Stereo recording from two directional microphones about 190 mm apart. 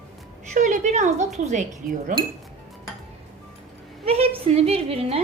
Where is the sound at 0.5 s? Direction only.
40° right (ahead or behind).